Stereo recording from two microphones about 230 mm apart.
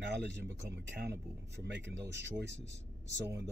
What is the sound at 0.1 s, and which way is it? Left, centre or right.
Speech, right.